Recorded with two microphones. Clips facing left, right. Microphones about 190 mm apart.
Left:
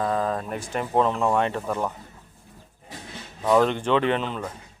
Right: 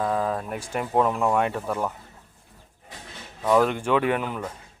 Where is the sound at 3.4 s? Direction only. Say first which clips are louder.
Left 1 dB; 5° right (ahead or behind).